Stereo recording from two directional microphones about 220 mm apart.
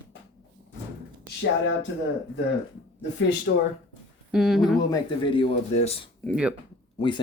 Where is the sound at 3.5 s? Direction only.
45° left (ahead or behind).